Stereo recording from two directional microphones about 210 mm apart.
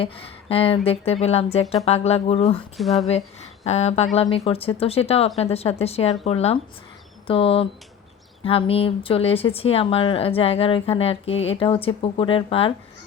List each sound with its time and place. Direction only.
0.0 s speech: 25° left (ahead or behind)
2.7 s speech: centre (ahead or behind)
3.1 s speech: 30° left (ahead or behind)